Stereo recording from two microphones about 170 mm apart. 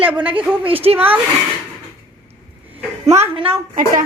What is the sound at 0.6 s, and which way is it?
Speech, 35° right (ahead or behind).